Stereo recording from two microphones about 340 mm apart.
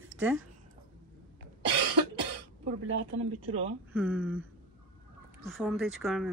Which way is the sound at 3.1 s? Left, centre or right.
Centre.